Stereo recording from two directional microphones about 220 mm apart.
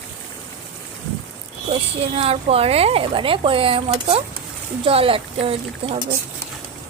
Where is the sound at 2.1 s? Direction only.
25° right (ahead or behind).